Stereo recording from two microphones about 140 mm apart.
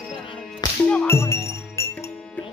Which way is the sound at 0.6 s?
25° left (ahead or behind).